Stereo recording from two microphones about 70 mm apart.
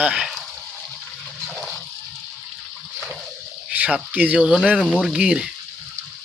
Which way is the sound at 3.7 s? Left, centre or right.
Right.